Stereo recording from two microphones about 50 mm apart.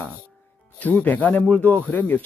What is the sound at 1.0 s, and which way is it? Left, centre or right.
Speech, left.